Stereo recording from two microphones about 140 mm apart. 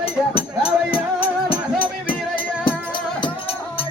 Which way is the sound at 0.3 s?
40° left (ahead or behind).